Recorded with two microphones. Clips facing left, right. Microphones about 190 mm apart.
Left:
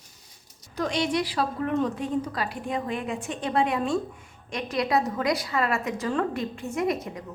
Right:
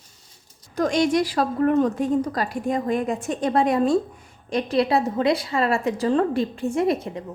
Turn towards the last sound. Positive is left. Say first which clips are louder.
# right 5 dB
turn(degrees=-30)  # may be behind; listen again after turning